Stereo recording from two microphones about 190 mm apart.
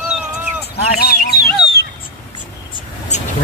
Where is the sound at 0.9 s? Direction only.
55° left (ahead or behind).